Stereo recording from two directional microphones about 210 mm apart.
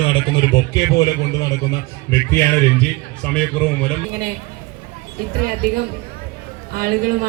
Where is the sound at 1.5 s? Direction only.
50° left (ahead or behind).